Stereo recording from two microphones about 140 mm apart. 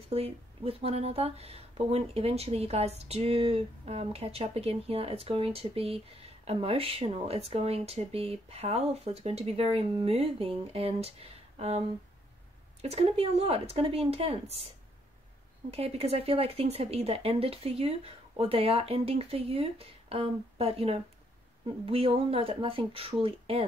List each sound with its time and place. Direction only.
0.1 s speech: 45° right (ahead or behind)
15.7 s speech: 45° right (ahead or behind)